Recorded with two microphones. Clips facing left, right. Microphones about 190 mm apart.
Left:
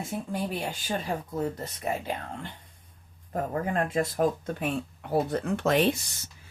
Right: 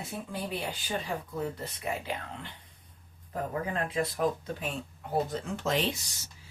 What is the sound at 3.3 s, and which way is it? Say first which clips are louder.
Speech: left 4 dB; 45° left (ahead or behind).